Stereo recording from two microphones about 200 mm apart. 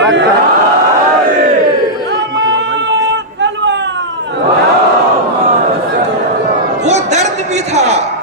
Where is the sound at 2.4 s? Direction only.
60° right (ahead or behind).